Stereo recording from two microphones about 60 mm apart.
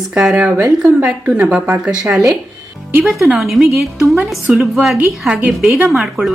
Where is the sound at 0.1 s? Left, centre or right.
Centre.